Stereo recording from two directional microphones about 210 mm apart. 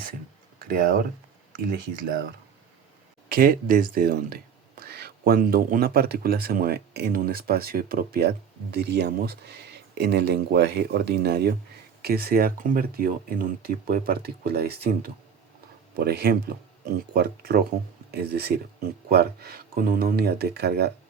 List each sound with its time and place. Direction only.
0.6 s speech: 45° right (ahead or behind)
3.2 s speech: 45° right (ahead or behind)